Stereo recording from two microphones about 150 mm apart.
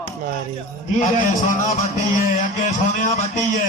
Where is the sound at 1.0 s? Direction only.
55° left (ahead or behind).